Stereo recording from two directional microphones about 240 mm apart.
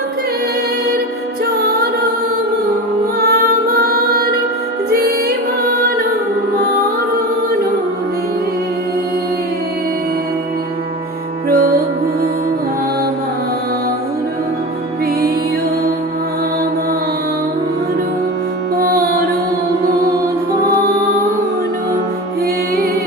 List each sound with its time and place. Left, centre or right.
4.9 s music: right
11.4 s music: right
18.8 s music: right